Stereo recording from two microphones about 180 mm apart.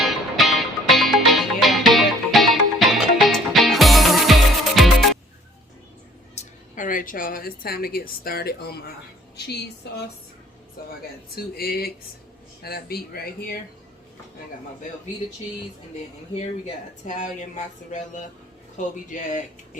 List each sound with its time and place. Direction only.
0.0 s music: centre (ahead or behind)
6.3 s speech: 45° left (ahead or behind)
9.4 s a sound: 65° left (ahead or behind)
11.5 s speech: 60° left (ahead or behind)
16.3 s speech: 45° left (ahead or behind)